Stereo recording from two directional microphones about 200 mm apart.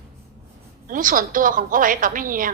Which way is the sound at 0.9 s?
45° right (ahead or behind).